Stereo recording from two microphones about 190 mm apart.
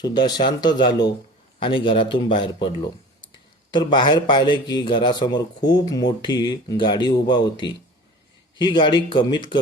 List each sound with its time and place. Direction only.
0.0 s speech: 20° left (ahead or behind)